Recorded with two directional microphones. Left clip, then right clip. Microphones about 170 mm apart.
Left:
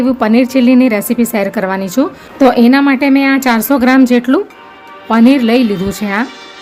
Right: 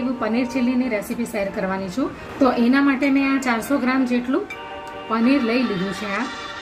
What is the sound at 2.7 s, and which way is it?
Speech, 60° left (ahead or behind).